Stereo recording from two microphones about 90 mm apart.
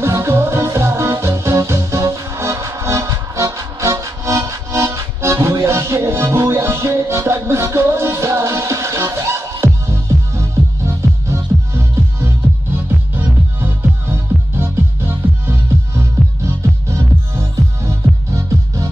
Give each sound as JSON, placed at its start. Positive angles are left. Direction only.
{"t": 0.0, "sound": "music", "side_deg": -30}